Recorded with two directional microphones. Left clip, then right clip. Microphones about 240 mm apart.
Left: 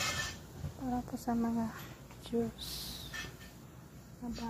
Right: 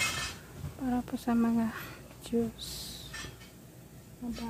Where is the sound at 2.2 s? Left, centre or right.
Centre.